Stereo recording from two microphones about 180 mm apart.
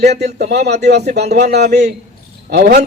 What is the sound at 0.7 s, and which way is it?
A man's voice, 70° right (ahead or behind).